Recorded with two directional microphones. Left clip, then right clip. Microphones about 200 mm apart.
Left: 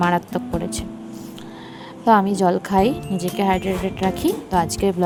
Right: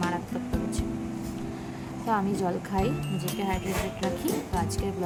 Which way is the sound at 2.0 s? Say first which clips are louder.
Left 12 dB; 45° left (ahead or behind).